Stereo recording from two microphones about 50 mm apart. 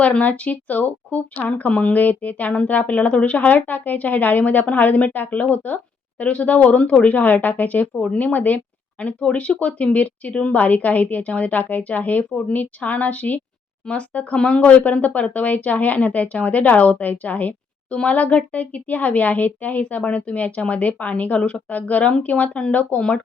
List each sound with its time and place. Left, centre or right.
0.0 s a woman's voice: left
7.9 s speech: left
8.2 s a woman's voice: left
23.0 s speech: centre